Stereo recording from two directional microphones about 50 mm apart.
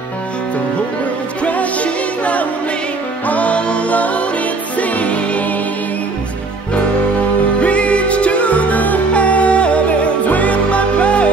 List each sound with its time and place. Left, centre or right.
1.4 s music: left
7.6 s music: left